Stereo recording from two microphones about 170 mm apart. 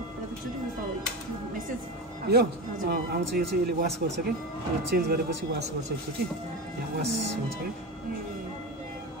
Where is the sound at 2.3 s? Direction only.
70° right (ahead or behind).